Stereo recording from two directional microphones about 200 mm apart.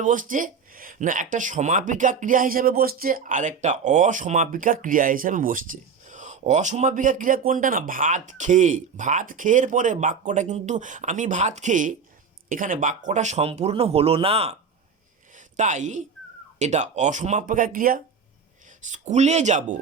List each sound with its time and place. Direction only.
0.0 s speech: 40° right (ahead or behind)
15.5 s speech: 40° right (ahead or behind)